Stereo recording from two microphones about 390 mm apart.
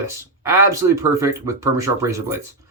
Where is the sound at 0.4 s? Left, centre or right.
Centre.